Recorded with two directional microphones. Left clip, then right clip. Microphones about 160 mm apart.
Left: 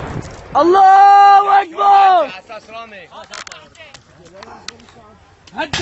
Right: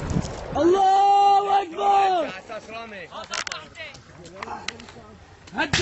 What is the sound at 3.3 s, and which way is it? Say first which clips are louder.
Speech: right 3 dB; 25° left (ahead or behind).